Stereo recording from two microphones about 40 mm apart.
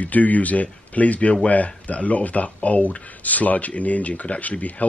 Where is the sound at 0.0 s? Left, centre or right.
Left.